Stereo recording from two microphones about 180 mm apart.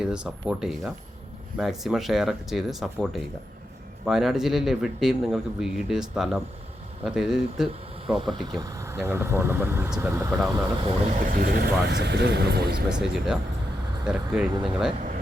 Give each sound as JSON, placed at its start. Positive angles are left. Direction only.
{"t": 0.0, "sound": "a man's voice", "side_deg": -5}
{"t": 8.5, "sound": "speech", "side_deg": -20}
{"t": 11.1, "sound": "speech", "side_deg": -50}
{"t": 12.9, "sound": "a man's voice", "side_deg": -5}